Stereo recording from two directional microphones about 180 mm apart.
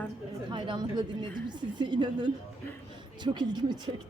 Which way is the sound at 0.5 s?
25° right (ahead or behind).